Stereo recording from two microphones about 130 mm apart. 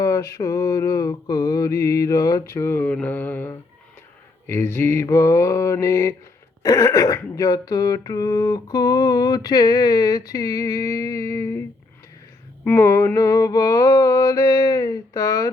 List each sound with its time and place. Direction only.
0.0 s throat clearing: 25° left (ahead or behind)
12.6 s throat clearing: 20° left (ahead or behind)